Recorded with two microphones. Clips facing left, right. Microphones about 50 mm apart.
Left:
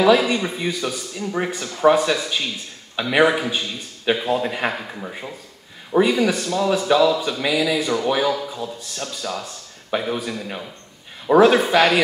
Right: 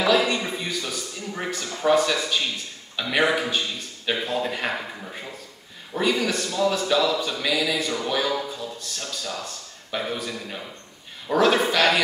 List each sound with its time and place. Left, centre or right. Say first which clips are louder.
0.6 s a man's voice: left 5 dB; centre